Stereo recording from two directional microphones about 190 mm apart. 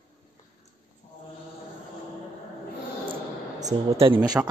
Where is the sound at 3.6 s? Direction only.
20° right (ahead or behind).